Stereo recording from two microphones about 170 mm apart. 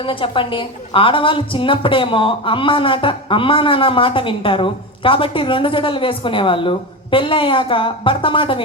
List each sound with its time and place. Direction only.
0.0 s a woman's voice: 30° left (ahead or behind)